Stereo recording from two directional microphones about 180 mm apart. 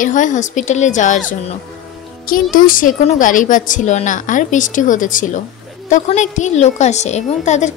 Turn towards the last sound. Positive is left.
turn(degrees=40)  # may be behind; listen again after turning